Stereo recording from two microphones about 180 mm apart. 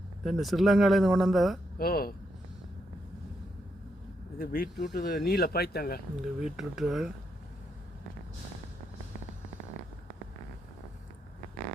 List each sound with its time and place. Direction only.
0.3 s speech: centre (ahead or behind)
1.8 s speech: 55° left (ahead or behind)
4.4 s speech: 55° left (ahead or behind)
6.4 s speech: centre (ahead or behind)